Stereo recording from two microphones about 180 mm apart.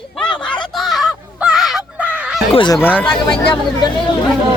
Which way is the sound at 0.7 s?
Centre (ahead or behind).